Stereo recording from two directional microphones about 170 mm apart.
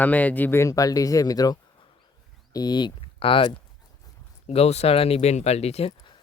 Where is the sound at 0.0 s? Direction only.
10° left (ahead or behind).